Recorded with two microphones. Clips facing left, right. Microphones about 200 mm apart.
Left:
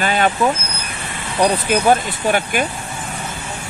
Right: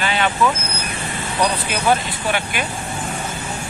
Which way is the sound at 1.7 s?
45° left (ahead or behind).